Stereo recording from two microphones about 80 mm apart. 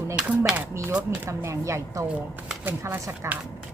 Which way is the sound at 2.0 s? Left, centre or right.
Centre.